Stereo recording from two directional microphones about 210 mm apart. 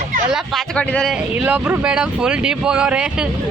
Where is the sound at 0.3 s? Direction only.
Centre (ahead or behind).